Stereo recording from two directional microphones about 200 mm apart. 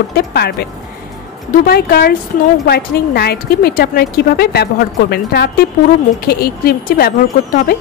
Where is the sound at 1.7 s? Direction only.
50° left (ahead or behind).